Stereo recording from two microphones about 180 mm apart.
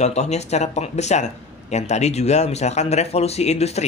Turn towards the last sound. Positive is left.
turn(degrees=35)  # may be behind; listen again after turning